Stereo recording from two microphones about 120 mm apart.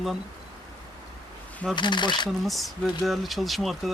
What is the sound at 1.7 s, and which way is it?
Speech, 40° left (ahead or behind).